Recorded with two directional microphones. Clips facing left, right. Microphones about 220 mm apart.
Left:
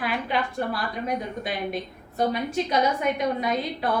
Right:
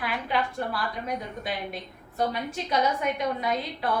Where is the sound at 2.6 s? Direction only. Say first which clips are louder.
Even; 20° left (ahead or behind).